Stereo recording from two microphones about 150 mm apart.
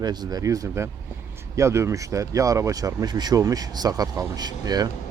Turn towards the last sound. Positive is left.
turn(degrees=-25)  # may be behind; listen again after turning